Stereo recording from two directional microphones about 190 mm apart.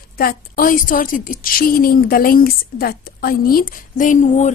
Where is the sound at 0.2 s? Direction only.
50° left (ahead or behind).